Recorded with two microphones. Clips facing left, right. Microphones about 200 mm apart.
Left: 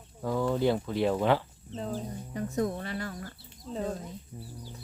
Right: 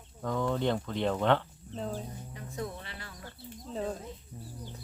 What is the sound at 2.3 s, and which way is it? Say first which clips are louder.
Speech: left 9 dB; 45° left (ahead or behind).